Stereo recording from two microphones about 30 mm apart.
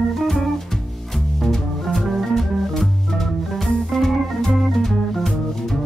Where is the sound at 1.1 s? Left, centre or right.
Centre.